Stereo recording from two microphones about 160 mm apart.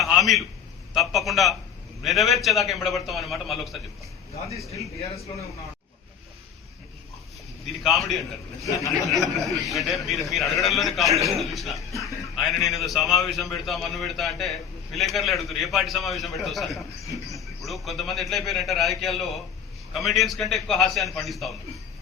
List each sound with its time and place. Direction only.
0.0 s a sound: centre (ahead or behind)
0.9 s a man's voice: centre (ahead or behind)
4.9 s speech: 40° left (ahead or behind)
7.9 s a man's voice: centre (ahead or behind)
8.6 s speech: 20° left (ahead or behind)
9.0 s a man's voice: centre (ahead or behind)